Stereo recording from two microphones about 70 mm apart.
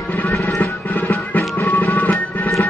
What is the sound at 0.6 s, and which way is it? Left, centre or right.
Music, left.